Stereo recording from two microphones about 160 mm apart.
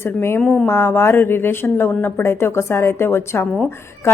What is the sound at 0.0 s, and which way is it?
Speech, 15° left (ahead or behind).